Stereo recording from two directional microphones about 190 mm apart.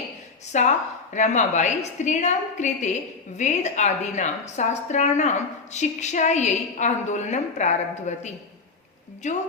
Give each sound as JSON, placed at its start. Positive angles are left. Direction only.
{"t": 0.5, "sound": "a woman's voice", "side_deg": 40}